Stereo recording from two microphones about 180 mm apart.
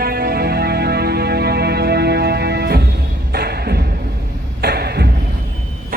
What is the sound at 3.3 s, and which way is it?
Beatboxing, 60° right (ahead or behind).